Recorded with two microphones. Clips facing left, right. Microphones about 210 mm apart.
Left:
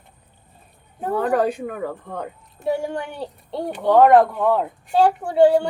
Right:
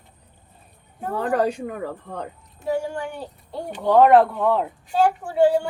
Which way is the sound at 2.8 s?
20° left (ahead or behind).